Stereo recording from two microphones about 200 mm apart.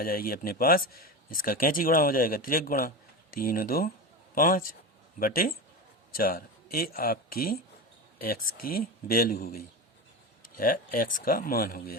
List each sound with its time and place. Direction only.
0.0 s speech: 45° left (ahead or behind)